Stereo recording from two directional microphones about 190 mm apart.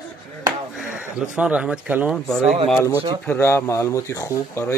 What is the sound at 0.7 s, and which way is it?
A man's voice, 5° right (ahead or behind).